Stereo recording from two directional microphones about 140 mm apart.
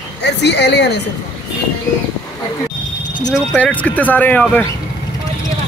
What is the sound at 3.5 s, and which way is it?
Speech, 10° left (ahead or behind).